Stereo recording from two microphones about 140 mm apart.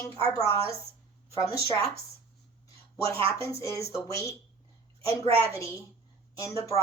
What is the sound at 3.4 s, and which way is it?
Speech, 20° left (ahead or behind).